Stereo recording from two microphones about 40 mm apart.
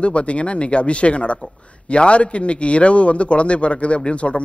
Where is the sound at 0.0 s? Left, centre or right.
Left.